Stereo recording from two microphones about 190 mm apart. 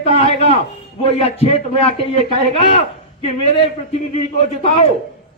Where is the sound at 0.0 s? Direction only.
35° left (ahead or behind).